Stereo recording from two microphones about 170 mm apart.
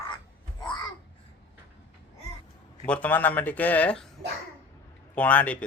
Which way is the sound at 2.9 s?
10° left (ahead or behind).